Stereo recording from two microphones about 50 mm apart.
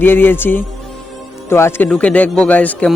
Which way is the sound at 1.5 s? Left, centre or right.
Left.